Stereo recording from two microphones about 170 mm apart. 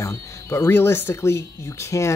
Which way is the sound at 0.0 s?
20° left (ahead or behind).